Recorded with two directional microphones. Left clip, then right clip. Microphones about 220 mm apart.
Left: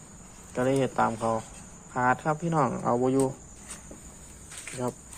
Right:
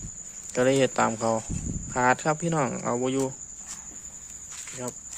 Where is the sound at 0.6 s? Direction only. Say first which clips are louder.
Right 3 dB; 35° right (ahead or behind).